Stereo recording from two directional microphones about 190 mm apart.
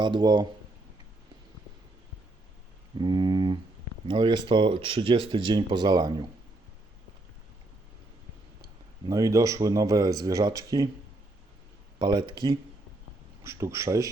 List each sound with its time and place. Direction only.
0.0 s speech: 25° right (ahead or behind)
3.0 s a sound: 25° right (ahead or behind)
4.0 s speech: 25° right (ahead or behind)
9.0 s speech: 15° right (ahead or behind)
11.9 s speech: 25° right (ahead or behind)